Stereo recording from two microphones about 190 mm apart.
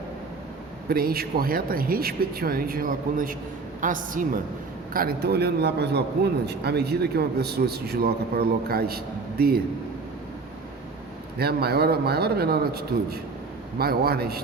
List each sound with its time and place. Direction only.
0.9 s speech: 50° right (ahead or behind)
4.9 s a man's voice: 55° right (ahead or behind)
11.3 s a man's voice: 55° right (ahead or behind)